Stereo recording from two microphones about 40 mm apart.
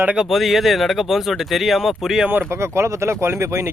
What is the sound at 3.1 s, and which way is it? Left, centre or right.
Speech, right.